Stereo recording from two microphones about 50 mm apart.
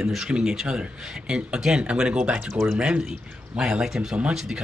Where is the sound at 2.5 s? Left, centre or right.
Centre.